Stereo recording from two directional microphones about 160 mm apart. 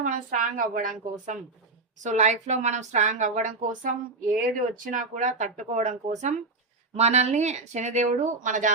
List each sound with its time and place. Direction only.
0.0 s a woman's voice: 55° right (ahead or behind)
2.0 s speech: 45° right (ahead or behind)